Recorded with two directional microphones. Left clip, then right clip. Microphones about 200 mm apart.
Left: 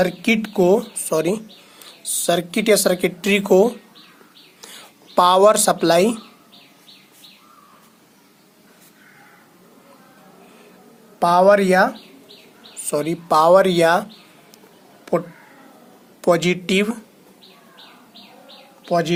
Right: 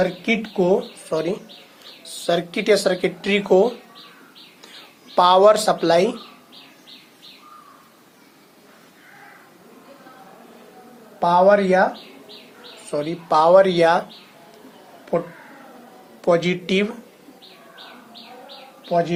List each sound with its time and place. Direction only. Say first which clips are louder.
0.0 s speech: left 2 dB; 45° left (ahead or behind)
5.1 s speech: even; 40° left (ahead or behind)
11.2 s speech: left 1 dB; 50° left (ahead or behind)
12.9 s speech: left 2 dB; 45° left (ahead or behind)
16.2 s speech: left 1 dB; 45° left (ahead or behind)
18.9 s speech: left 1 dB; 50° left (ahead or behind)